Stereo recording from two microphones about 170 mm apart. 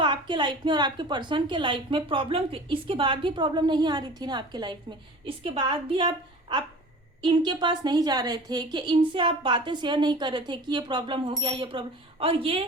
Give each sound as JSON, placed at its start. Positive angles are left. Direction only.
{"t": 0.0, "sound": "a woman's voice", "side_deg": -30}